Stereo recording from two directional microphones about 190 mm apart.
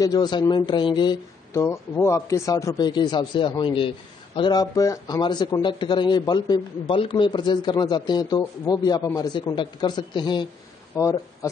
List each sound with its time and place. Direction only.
0.0 s a man's voice: 20° left (ahead or behind)